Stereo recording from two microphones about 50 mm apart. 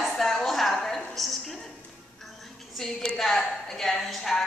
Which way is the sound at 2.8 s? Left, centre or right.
Centre.